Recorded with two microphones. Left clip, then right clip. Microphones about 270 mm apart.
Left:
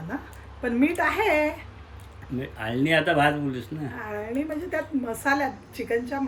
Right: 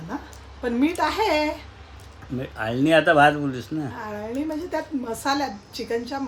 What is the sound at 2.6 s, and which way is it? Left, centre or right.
Speech, centre.